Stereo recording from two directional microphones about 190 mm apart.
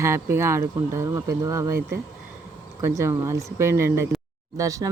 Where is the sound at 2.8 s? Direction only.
15° right (ahead or behind).